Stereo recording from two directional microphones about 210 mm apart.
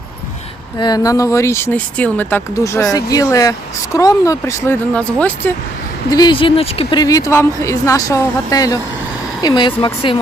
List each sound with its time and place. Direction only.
0.8 s speech: 20° left (ahead or behind)
6.1 s speech: 20° left (ahead or behind)